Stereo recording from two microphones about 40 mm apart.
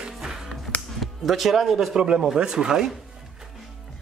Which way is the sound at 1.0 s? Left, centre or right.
Centre.